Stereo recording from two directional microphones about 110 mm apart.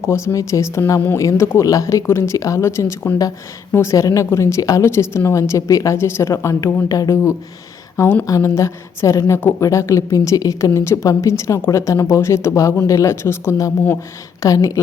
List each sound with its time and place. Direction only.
0.0 s a woman's voice: 25° left (ahead or behind)